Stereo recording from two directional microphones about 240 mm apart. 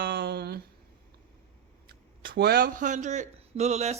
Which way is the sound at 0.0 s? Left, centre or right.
Right.